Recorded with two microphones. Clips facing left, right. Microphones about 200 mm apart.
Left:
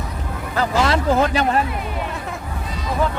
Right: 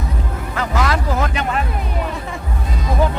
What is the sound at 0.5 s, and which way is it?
Vehicle, 30° left (ahead or behind).